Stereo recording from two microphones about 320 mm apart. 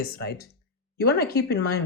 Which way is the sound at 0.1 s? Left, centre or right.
Left.